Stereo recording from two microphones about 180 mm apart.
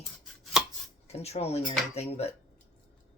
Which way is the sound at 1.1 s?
35° left (ahead or behind).